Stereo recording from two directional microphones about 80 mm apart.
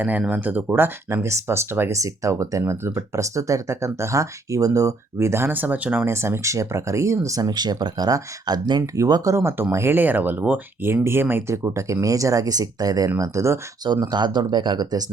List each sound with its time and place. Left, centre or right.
0.0 s speech: centre
1.9 s speech: right
6.1 s speech: right
9.0 s speech: right
9.3 s speech: right
11.5 s speech: right
13.1 s speech: right
13.8 s speech: right